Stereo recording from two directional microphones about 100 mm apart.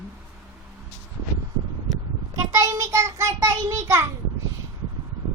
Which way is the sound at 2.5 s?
35° right (ahead or behind).